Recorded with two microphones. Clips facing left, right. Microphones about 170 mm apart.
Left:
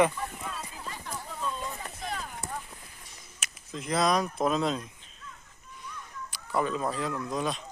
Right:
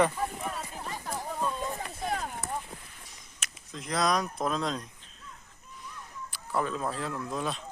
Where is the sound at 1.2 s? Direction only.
40° right (ahead or behind).